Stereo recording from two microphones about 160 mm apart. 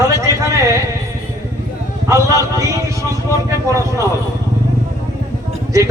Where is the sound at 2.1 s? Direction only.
20° right (ahead or behind).